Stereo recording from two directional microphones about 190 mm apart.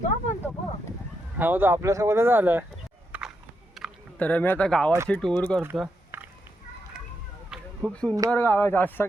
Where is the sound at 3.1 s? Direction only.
10° right (ahead or behind).